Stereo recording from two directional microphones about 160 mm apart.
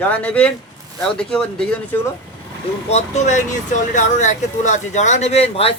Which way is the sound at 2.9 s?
45° left (ahead or behind).